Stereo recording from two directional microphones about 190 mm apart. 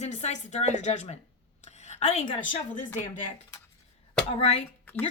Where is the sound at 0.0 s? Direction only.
35° left (ahead or behind).